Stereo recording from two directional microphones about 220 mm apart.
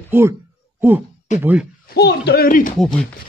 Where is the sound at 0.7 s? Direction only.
10° right (ahead or behind).